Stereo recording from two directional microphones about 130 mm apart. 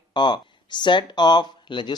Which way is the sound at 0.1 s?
35° left (ahead or behind).